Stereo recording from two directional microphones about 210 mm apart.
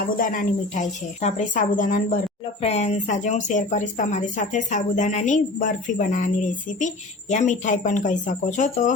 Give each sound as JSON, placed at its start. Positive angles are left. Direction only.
{"t": 0.0, "sound": "speech", "side_deg": 40}